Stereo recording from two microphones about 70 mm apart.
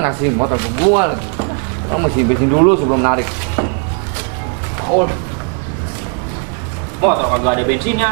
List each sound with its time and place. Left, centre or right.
0.0 s speech: right
4.9 s speech: right
7.0 s speech: centre